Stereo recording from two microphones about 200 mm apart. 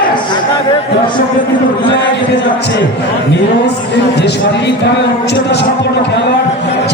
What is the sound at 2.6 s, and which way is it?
Speech, 60° left (ahead or behind).